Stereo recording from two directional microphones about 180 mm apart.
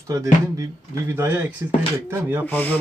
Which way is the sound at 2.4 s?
10° left (ahead or behind).